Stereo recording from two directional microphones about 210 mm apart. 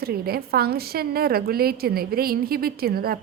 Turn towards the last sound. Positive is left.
turn(degrees=-45)  # may be behind; listen again after turning